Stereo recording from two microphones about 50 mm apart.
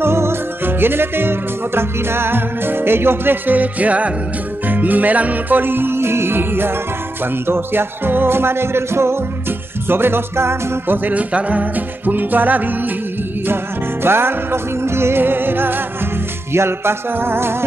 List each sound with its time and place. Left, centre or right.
0.0 s music: right
11.1 s music: right
14.0 s music: right
16.5 s music: right